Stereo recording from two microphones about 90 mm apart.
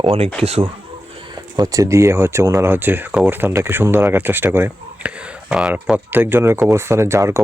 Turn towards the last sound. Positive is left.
turn(degrees=-30)  # may be behind; listen again after turning